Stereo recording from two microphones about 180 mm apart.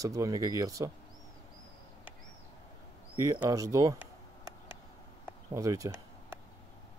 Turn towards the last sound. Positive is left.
turn(degrees=-15)  # may be behind; listen again after turning